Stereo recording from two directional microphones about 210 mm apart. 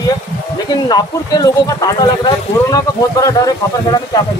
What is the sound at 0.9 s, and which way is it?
Speech, 20° left (ahead or behind).